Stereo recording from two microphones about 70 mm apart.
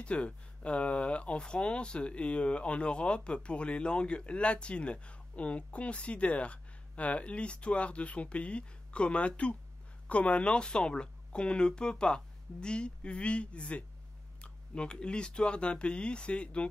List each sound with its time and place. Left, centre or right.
0.0 s speech: centre